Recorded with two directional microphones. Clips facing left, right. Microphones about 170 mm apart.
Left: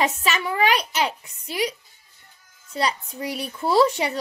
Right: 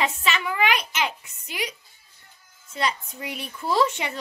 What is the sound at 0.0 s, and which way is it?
A child's voice, 40° left (ahead or behind).